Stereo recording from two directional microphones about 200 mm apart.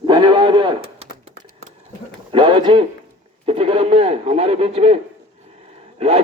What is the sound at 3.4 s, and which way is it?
Speech, 30° right (ahead or behind).